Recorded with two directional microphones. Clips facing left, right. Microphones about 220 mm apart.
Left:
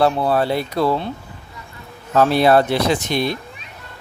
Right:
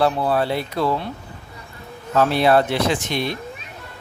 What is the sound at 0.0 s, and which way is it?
Speech, 40° left (ahead or behind).